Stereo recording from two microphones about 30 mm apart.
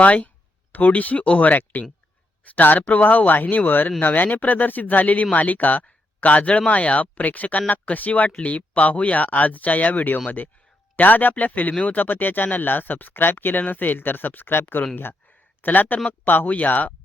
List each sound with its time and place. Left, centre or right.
0.0 s speech: left
2.6 s speech: left
10.2 s speech: left
16.5 s speech: left